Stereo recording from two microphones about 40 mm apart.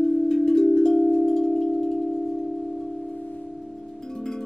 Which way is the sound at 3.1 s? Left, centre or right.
Left.